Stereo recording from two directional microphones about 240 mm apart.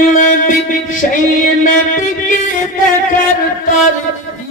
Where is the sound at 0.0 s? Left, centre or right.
Left.